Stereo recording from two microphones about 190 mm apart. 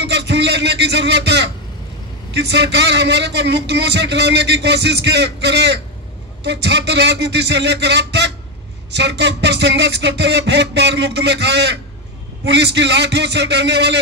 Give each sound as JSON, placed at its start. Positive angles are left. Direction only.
{"t": 0.0, "sound": "a man's voice", "side_deg": -65}